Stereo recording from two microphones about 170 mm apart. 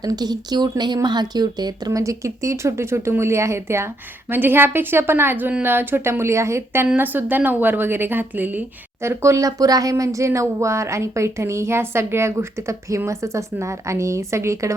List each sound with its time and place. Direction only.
0.0 s a woman's voice: 25° right (ahead or behind)